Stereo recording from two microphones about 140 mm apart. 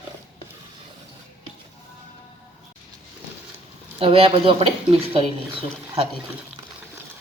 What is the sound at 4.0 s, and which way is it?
A woman's voice, 40° right (ahead or behind).